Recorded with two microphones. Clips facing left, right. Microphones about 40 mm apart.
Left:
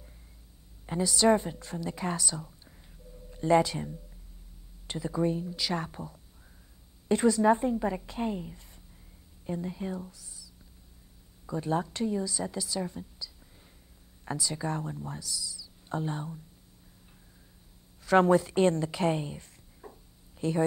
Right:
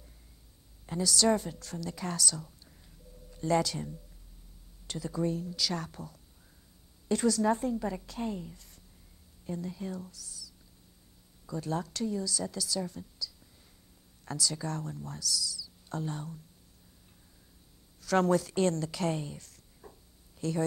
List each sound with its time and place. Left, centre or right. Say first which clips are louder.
0.8 s a woman's voice: left 3 dB; left
18.0 s a woman's voice: left 4 dB; left